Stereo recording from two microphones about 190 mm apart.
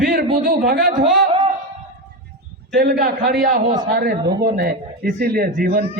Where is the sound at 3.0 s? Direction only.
50° right (ahead or behind).